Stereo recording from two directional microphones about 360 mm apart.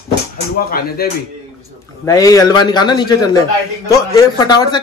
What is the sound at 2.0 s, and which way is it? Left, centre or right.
A man's voice, centre.